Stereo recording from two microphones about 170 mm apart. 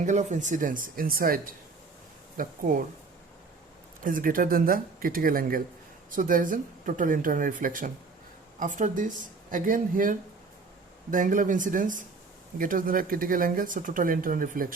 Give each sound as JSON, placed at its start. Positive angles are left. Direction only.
{"t": 0.0, "sound": "speech", "side_deg": -45}
{"t": 4.0, "sound": "speech", "side_deg": -55}